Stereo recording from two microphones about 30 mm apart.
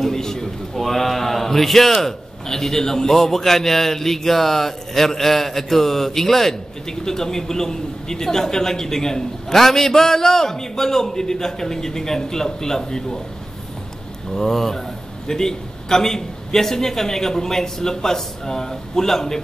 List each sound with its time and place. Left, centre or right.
0.0 s a sound: centre
0.7 s a man's voice: centre
14.3 s a man's voice: centre